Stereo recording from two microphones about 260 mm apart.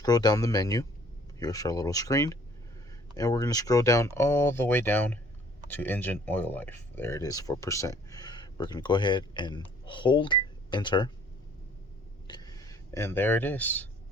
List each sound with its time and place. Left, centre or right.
0.0 s speech: centre
12.3 s speech: centre